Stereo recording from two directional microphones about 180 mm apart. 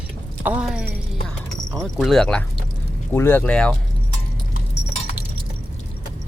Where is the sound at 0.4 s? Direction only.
5° right (ahead or behind).